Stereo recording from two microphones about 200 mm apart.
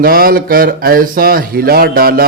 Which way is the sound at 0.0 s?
45° right (ahead or behind).